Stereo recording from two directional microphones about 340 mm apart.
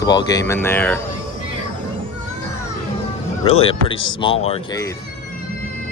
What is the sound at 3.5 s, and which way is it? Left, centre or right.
Speech, centre.